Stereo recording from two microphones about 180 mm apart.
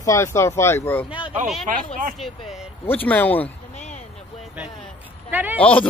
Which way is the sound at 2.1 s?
Centre (ahead or behind).